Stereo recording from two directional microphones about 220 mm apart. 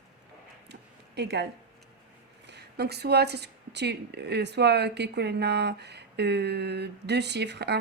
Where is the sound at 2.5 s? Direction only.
50° right (ahead or behind).